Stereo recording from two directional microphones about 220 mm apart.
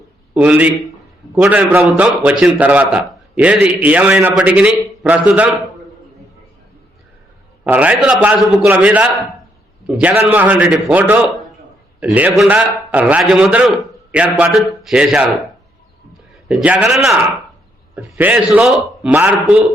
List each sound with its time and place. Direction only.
0.3 s a man's voice: 5° right (ahead or behind)
7.6 s a man's voice: 5° right (ahead or behind)
16.5 s a man's voice: centre (ahead or behind)